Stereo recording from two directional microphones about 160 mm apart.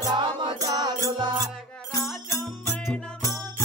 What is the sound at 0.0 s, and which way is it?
Music, 25° right (ahead or behind).